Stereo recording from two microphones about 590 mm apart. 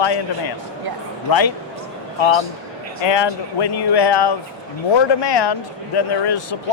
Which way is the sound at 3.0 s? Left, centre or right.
Left.